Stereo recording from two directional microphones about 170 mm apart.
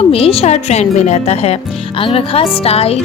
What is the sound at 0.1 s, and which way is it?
Speech, 35° left (ahead or behind).